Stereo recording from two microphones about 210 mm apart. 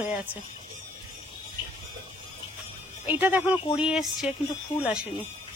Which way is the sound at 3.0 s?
10° right (ahead or behind).